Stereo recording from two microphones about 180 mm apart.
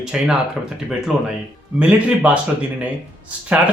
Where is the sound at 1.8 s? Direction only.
5° right (ahead or behind).